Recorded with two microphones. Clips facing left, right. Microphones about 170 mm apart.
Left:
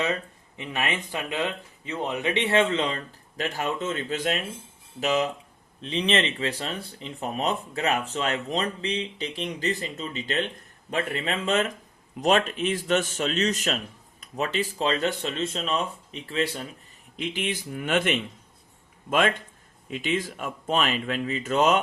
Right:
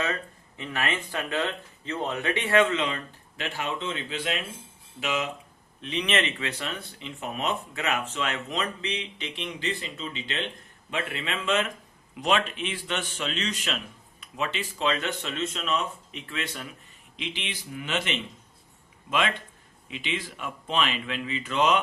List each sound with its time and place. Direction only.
0.0 s speech: 20° left (ahead or behind)
17.2 s speech: 45° left (ahead or behind)